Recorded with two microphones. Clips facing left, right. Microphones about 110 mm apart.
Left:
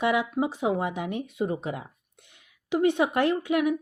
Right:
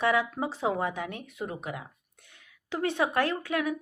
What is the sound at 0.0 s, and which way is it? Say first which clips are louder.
A woman's voice: left 2 dB; 15° left (ahead or behind).